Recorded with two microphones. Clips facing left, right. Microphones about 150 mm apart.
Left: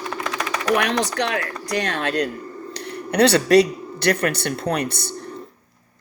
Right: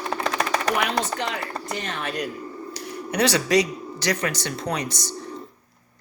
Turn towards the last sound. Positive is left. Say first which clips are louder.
# left 4 dB
turn(degrees=60)  # may be behind; listen again after turning